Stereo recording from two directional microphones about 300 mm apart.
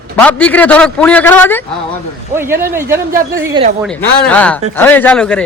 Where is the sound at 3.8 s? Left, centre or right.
Centre.